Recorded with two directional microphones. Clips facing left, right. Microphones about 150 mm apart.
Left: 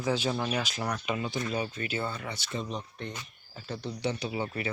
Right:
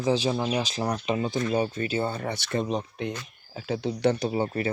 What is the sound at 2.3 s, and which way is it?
Speech, 60° right (ahead or behind).